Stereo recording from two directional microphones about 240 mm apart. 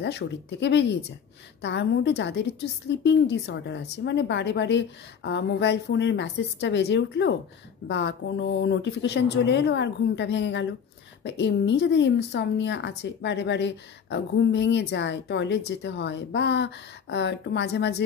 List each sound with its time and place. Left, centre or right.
0.0 s speech: left